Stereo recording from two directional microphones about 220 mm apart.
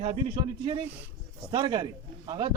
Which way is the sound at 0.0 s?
25° right (ahead or behind).